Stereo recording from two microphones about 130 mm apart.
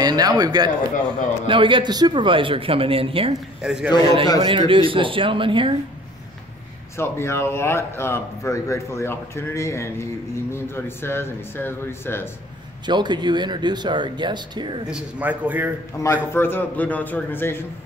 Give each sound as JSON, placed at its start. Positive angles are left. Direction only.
{"t": 0.0, "sound": "speech", "side_deg": -30}
{"t": 3.6, "sound": "a man's voice", "side_deg": -5}
{"t": 4.0, "sound": "a man's voice", "side_deg": -50}
{"t": 7.0, "sound": "a man's voice", "side_deg": 20}
{"t": 12.8, "sound": "speech", "side_deg": -35}
{"t": 14.9, "sound": "a man's voice", "side_deg": -10}
{"t": 16.0, "sound": "speech", "side_deg": 15}